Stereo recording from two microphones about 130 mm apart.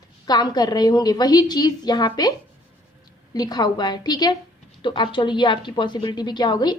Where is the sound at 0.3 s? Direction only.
30° left (ahead or behind).